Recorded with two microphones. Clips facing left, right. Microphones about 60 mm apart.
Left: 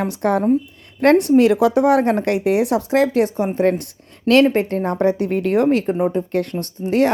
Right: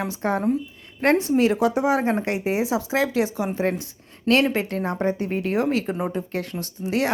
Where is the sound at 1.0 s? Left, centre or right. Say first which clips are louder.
Left 6 dB; left.